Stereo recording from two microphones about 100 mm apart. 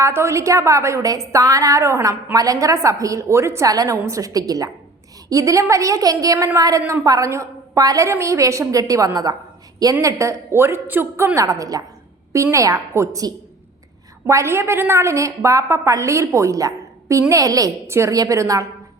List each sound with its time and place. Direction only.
0.0 s a woman's voice: 30° right (ahead or behind)